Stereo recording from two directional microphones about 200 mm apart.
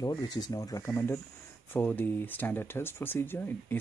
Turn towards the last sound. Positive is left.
turn(degrees=10)  # may be behind; listen again after turning